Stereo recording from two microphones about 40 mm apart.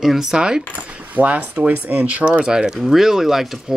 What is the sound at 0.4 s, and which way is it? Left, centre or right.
Speech, right.